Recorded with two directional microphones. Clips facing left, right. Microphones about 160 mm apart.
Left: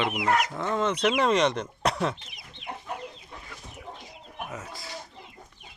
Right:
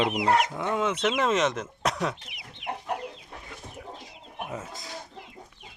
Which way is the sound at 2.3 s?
65° right (ahead or behind).